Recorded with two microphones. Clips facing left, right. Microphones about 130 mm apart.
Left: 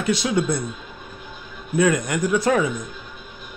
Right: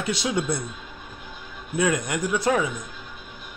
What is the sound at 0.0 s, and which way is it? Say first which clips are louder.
Speech: left 4 dB; 20° right (ahead or behind).